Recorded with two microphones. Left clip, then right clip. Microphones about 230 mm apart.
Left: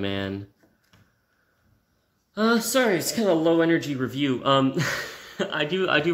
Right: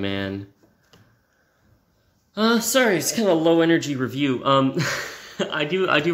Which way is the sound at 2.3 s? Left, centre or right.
Centre.